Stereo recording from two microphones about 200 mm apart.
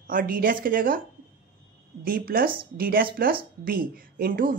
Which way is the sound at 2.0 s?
45° right (ahead or behind).